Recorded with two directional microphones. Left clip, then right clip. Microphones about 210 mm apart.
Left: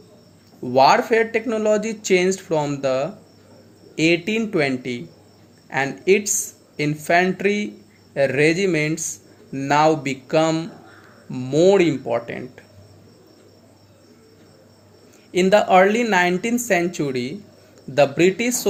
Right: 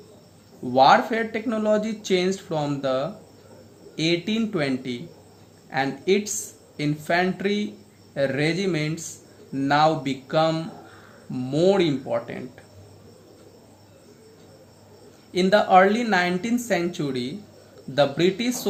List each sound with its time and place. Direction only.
0.7 s speech: 25° left (ahead or behind)
15.3 s speech: 25° left (ahead or behind)